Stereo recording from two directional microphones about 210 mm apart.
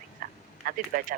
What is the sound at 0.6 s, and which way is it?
Speech, 40° right (ahead or behind).